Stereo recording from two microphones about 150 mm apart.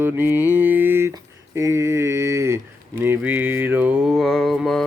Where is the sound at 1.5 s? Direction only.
20° right (ahead or behind).